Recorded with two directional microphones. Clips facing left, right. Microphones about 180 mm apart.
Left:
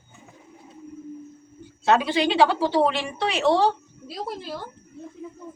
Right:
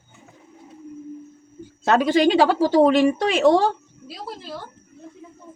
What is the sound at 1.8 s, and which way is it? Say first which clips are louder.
Speech: right 4 dB; 45° right (ahead or behind).